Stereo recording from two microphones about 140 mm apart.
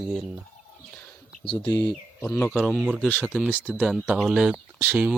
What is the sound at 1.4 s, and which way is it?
Speech, 35° left (ahead or behind).